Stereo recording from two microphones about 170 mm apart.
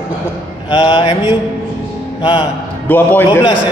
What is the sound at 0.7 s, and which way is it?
Mantra, 30° left (ahead or behind).